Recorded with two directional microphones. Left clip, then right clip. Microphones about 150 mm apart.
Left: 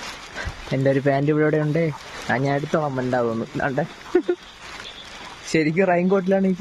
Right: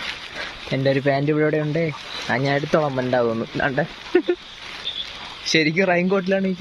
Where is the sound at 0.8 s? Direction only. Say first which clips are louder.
Even; 20° left (ahead or behind).